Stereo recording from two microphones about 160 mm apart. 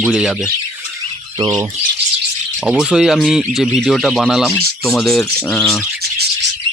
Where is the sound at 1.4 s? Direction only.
25° right (ahead or behind).